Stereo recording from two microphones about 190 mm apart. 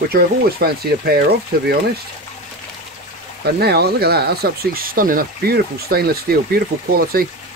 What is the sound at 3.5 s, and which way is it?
Speech, 55° right (ahead or behind).